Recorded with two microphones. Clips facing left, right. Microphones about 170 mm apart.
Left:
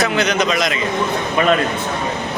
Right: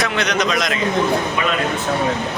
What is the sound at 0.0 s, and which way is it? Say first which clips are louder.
Speech: left 3 dB; centre (ahead or behind).